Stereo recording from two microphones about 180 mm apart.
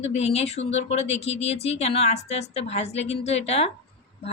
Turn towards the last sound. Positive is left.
turn(degrees=35)  # may be behind; listen again after turning